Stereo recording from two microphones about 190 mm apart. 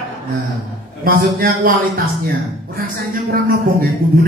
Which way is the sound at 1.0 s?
50° right (ahead or behind).